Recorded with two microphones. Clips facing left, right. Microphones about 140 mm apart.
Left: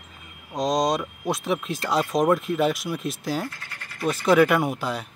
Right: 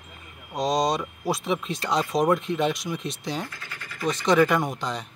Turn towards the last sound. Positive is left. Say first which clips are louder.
# left 2 dB
turn(degrees=5)  # may be behind; listen again after turning